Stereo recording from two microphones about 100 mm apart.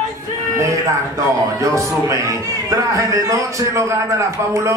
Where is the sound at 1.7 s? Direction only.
30° right (ahead or behind).